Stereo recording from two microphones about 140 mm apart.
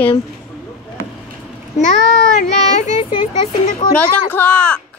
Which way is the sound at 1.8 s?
65° left (ahead or behind).